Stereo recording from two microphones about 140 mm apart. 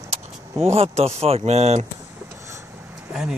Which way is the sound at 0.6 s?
50° right (ahead or behind).